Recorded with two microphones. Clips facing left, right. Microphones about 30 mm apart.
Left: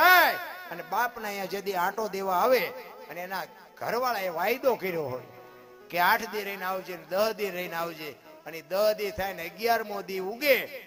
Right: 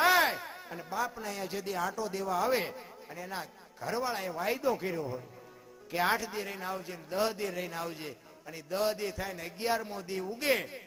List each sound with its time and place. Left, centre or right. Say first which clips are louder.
0.0 s a sound: left 6 dB; centre
1.3 s a man's voice: left 4 dB; centre
2.5 s a man's voice: left 6 dB; centre
3.2 s a man's voice: left 4 dB; centre